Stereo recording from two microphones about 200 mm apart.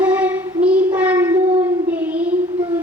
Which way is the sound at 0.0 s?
5° right (ahead or behind).